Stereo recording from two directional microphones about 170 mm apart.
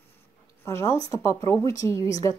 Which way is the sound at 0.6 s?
15° left (ahead or behind).